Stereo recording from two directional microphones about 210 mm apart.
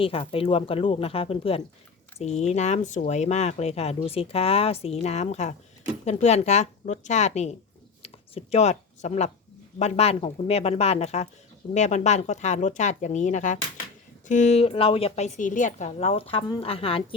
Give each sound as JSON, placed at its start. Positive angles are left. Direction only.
{"t": 0.0, "sound": "a woman's voice", "side_deg": 25}
{"t": 8.0, "sound": "a sound", "side_deg": 30}
{"t": 9.7, "sound": "a woman's voice", "side_deg": 30}